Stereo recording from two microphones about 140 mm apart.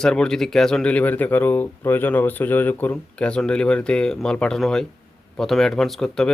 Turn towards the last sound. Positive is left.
turn(degrees=5)  # may be behind; listen again after turning